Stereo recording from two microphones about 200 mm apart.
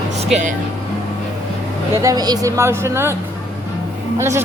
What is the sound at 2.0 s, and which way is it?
Speech, 20° right (ahead or behind).